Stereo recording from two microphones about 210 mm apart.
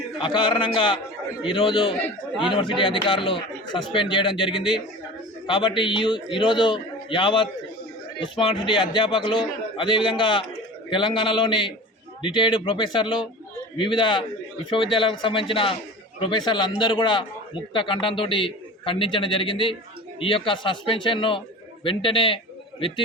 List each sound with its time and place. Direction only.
0.2 s a man's voice: 20° left (ahead or behind)